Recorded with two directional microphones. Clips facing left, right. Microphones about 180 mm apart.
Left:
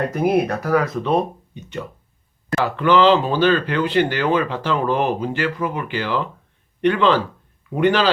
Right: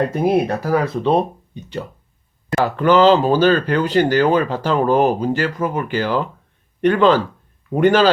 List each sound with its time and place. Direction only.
0.1 s a man's voice: 30° right (ahead or behind); by 8.1 s 45° right (ahead or behind)